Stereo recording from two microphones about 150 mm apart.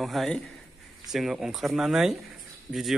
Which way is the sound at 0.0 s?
Centre (ahead or behind).